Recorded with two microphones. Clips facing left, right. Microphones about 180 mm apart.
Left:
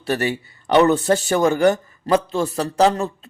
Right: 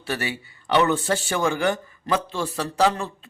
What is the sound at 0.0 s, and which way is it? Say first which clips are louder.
A man's voice: left 7 dB; 40° left (ahead or behind).